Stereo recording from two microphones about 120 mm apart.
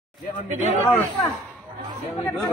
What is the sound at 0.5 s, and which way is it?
Speech, 80° right.